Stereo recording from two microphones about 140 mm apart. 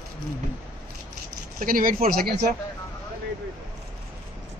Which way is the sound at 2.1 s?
75° right (ahead or behind).